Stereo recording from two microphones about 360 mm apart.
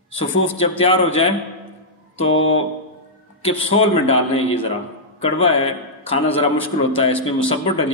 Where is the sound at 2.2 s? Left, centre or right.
Left.